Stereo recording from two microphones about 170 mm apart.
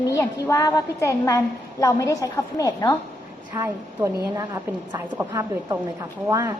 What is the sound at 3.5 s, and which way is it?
A woman's voice, 20° right (ahead or behind).